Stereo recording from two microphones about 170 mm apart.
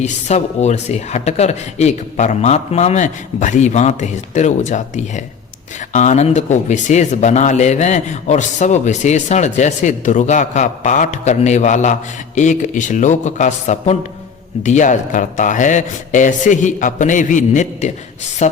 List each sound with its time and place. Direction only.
0.0 s speech: 40° left (ahead or behind)